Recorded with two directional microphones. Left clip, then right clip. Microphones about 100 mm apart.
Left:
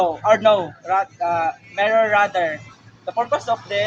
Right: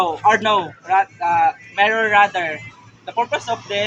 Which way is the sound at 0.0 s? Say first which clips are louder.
Even; 35° left (ahead or behind).